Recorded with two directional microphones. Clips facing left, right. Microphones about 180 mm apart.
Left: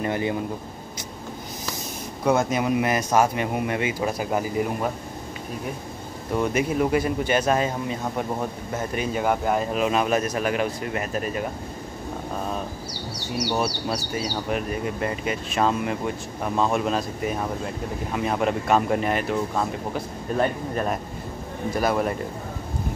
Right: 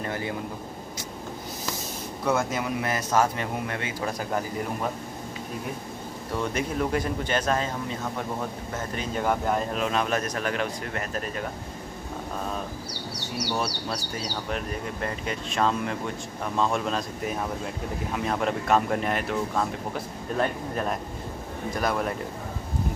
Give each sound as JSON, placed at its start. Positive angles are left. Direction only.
{"t": 0.0, "sound": "a man's voice", "side_deg": 20}
{"t": 2.2, "sound": "a man's voice", "side_deg": 20}
{"t": 6.3, "sound": "a man's voice", "side_deg": 10}
{"t": 13.6, "sound": "a man's voice", "side_deg": 10}